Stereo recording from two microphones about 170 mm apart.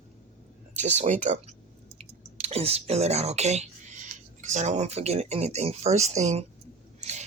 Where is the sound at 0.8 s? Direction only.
45° right (ahead or behind).